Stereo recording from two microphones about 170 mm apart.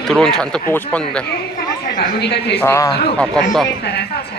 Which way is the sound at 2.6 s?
15° left (ahead or behind).